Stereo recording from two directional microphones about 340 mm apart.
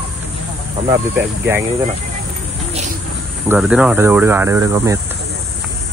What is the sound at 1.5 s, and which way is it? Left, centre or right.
Speech, centre.